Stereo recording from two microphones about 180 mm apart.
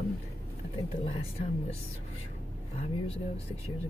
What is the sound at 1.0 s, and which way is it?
Speech, 35° left (ahead or behind).